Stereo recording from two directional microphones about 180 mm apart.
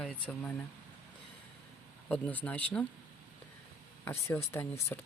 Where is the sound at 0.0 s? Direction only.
5° left (ahead or behind).